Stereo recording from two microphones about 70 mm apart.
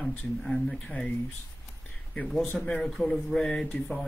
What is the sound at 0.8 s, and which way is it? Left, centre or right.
Speech, centre.